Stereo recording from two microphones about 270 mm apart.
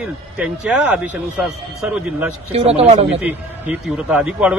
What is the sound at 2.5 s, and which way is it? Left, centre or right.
Speech, right.